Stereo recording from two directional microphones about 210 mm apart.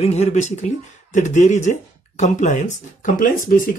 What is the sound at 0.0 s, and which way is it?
Speech, 30° left (ahead or behind).